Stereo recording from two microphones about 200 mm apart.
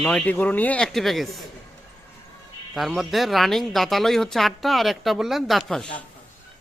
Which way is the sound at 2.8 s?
Centre (ahead or behind).